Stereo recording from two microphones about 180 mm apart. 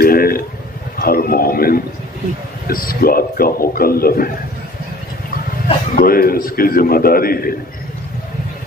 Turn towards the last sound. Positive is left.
turn(degrees=55)  # may be behind; listen again after turning